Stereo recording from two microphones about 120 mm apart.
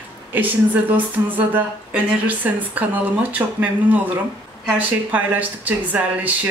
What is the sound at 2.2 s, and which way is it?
Speech, 15° right (ahead or behind).